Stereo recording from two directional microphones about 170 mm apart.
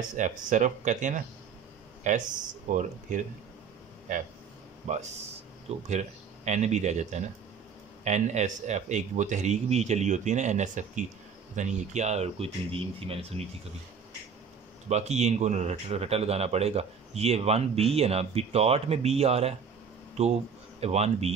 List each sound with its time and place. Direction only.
0.1 s a man's voice: 45° right (ahead or behind)
4.9 s a man's voice: 45° right (ahead or behind)
14.9 s speech: 40° right (ahead or behind)